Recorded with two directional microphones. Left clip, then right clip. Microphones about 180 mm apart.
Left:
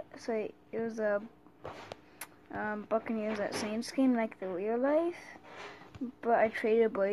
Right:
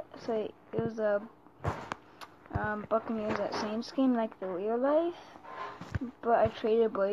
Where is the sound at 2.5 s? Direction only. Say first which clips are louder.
Right 2 dB; 15° left (ahead or behind).